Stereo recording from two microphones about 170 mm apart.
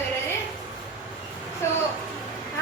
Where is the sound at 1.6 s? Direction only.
15° left (ahead or behind).